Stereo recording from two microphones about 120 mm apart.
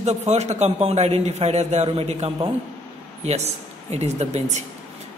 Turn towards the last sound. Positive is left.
turn(degrees=-70)  # may be behind; listen again after turning